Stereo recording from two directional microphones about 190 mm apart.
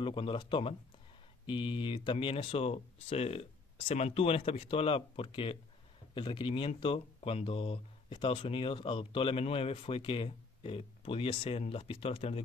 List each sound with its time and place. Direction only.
0.0 s speech: 25° left (ahead or behind)